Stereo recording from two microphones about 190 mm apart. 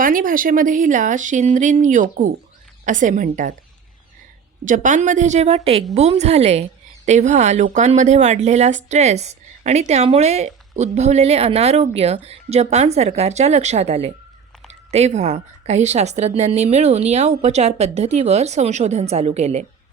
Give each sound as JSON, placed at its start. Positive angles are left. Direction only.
{"t": 0.0, "sound": "a woman's voice", "side_deg": -45}
{"t": 4.6, "sound": "a woman's voice", "side_deg": -40}